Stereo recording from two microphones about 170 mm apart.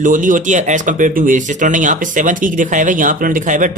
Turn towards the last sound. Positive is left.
turn(degrees=-50)  # may be behind; listen again after turning